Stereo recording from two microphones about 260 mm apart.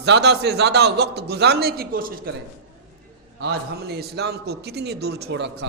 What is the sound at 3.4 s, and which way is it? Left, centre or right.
A man's voice, right.